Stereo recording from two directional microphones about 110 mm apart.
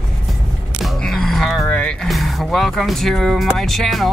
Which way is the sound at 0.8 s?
Centre (ahead or behind).